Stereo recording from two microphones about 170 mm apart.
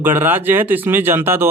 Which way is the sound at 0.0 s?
10° right (ahead or behind).